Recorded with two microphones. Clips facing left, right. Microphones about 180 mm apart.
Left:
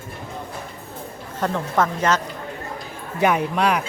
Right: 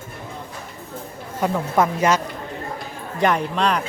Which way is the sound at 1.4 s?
10° right (ahead or behind).